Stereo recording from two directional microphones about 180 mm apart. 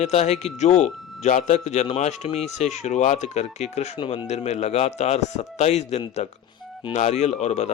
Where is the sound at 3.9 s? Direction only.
25° left (ahead or behind).